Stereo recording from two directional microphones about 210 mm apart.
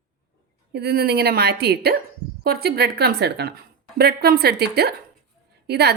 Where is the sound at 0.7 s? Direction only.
50° right (ahead or behind).